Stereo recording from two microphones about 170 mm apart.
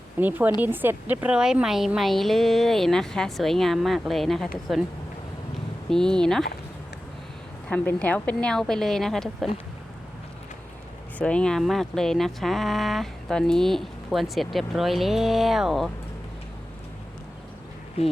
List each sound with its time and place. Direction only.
0.2 s speech: 10° right (ahead or behind)
5.9 s speech: 5° left (ahead or behind)
7.7 s speech: 10° left (ahead or behind)
11.2 s speech: 5° left (ahead or behind)
18.0 s speech: 35° left (ahead or behind)